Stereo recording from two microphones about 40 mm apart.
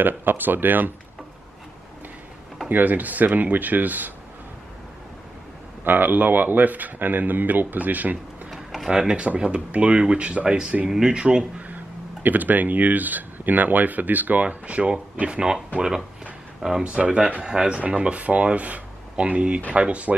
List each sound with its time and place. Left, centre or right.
0.0 s speech: right
2.7 s speech: right
5.9 s speech: right
8.9 s speech: right
10.9 s speech: centre
11.1 s speech: right
11.7 s speech: right
15.2 s speech: right
16.8 s speech: right